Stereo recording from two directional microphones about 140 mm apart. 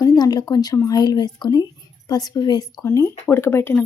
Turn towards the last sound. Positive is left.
turn(degrees=15)  # may be behind; listen again after turning